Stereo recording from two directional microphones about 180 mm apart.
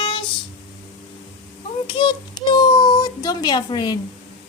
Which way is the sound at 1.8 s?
25° left (ahead or behind).